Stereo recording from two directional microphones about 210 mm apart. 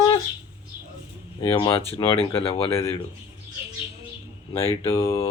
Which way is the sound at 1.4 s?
25° left (ahead or behind).